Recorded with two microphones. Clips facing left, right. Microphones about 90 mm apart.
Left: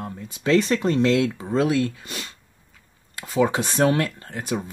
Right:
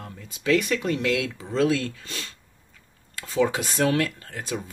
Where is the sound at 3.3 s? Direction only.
20° left (ahead or behind).